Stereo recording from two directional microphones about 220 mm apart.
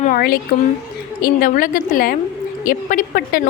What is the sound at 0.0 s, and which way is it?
A woman's voice, 40° left (ahead or behind).